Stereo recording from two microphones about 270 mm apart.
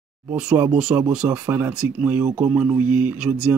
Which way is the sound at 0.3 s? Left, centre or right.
Centre.